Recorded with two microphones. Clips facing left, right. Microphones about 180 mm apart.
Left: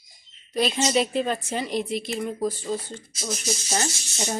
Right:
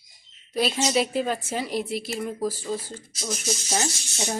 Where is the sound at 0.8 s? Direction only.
5° right (ahead or behind).